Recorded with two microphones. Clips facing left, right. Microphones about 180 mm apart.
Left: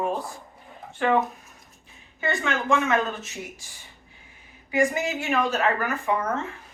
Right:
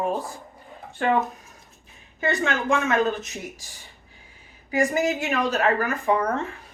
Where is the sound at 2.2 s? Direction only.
40° right (ahead or behind).